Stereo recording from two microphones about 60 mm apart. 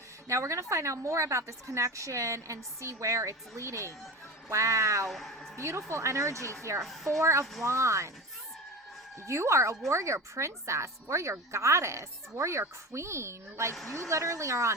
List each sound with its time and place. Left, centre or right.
0.3 s a woman's voice: right
5.0 s a woman's voice: centre
5.5 s a woman's voice: right
9.2 s a woman's voice: right